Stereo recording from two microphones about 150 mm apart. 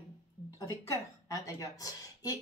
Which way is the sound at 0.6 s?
20° left (ahead or behind).